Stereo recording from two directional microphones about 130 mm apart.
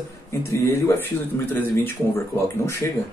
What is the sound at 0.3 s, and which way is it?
Speech, 20° left (ahead or behind).